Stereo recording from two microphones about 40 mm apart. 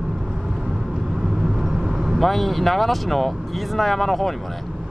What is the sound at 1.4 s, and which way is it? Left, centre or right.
Vehicle, centre.